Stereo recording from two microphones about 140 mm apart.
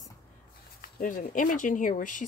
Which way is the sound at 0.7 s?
85° left.